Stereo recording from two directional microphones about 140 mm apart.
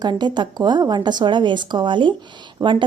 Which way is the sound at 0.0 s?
30° right (ahead or behind).